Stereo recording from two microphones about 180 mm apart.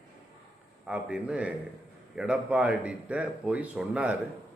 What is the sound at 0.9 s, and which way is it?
A man's voice, 5° right (ahead or behind).